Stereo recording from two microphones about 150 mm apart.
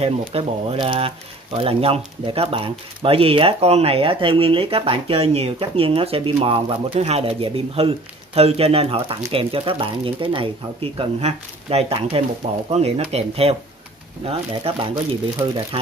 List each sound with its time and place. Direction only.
0.0 s speech: 40° right (ahead or behind)
15.4 s speech: 25° right (ahead or behind)